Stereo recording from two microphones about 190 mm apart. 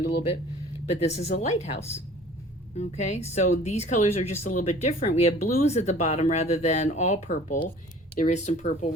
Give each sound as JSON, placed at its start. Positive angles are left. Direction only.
{"t": 0.9, "sound": "speech", "side_deg": 35}
{"t": 2.7, "sound": "speech", "side_deg": 35}